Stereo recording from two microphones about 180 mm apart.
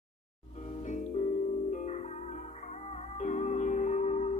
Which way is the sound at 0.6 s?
40° left (ahead or behind).